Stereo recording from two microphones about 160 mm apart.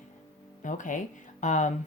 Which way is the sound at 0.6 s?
50° left (ahead or behind).